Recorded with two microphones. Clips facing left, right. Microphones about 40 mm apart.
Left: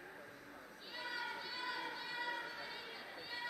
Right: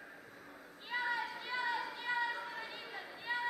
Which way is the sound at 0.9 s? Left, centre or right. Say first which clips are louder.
Right 7 dB; right.